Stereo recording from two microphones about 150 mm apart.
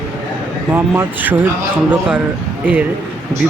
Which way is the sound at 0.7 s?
15° right (ahead or behind).